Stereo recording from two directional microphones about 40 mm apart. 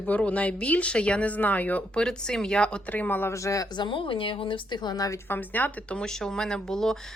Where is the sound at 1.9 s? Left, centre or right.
Centre.